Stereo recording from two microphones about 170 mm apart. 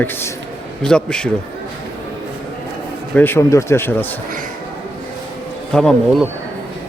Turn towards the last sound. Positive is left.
turn(degrees=0)  # may be behind; listen again after turning